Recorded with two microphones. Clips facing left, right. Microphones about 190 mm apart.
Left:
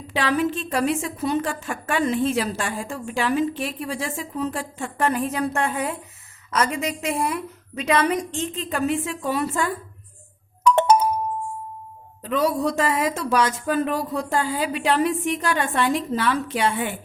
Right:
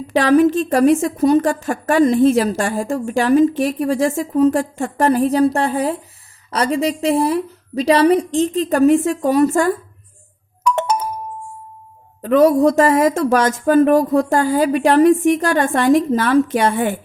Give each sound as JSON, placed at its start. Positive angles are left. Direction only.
{"t": 0.1, "sound": "a woman's voice", "side_deg": -45}
{"t": 10.6, "sound": "doorbell", "side_deg": 30}
{"t": 12.2, "sound": "a woman's voice", "side_deg": -50}